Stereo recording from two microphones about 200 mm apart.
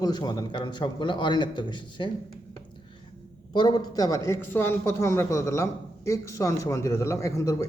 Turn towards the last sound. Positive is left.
turn(degrees=15)  # may be behind; listen again after turning